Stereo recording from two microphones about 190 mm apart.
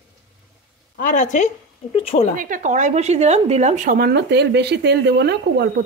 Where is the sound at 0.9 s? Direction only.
45° left (ahead or behind).